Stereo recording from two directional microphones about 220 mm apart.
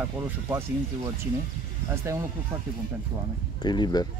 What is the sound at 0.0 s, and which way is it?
Speech, 10° right (ahead or behind).